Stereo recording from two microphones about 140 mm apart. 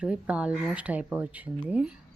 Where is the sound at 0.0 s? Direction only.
10° right (ahead or behind).